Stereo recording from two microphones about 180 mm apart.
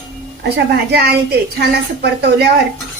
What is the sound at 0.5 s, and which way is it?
A woman's voice, 65° right (ahead or behind).